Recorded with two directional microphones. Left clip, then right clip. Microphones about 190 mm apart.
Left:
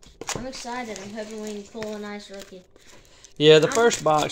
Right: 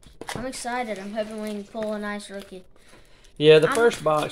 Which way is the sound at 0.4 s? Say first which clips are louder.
Right 3 dB; 50° right (ahead or behind).